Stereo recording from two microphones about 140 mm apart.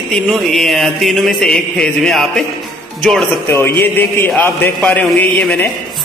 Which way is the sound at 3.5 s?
15° left (ahead or behind).